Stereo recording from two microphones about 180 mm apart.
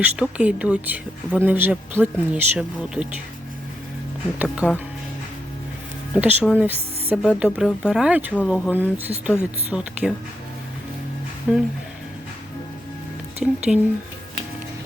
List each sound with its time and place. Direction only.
0.0 s speech: 5° right (ahead or behind)
4.4 s speech: 5° left (ahead or behind)
6.1 s speech: 10° right (ahead or behind)
11.5 s speech: 5° right (ahead or behind)
13.7 s speech: centre (ahead or behind)